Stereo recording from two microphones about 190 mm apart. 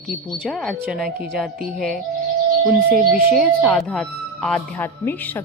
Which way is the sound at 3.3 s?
Centre (ahead or behind).